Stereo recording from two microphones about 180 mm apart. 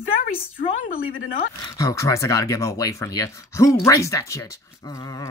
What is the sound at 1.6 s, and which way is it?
Speech, 20° left (ahead or behind).